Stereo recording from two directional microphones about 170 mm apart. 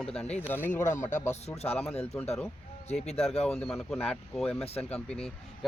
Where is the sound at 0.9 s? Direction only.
45° left (ahead or behind).